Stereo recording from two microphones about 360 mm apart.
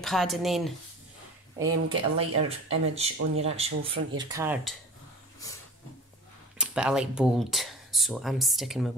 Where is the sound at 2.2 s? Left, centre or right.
Centre.